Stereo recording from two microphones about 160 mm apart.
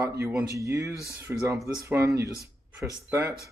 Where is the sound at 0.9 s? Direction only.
20° left (ahead or behind).